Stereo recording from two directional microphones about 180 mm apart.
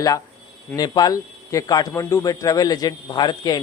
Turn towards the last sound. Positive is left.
turn(degrees=25)  # may be behind; listen again after turning